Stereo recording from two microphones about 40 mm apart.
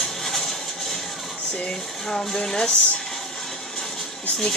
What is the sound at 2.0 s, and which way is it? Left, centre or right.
Speech, centre.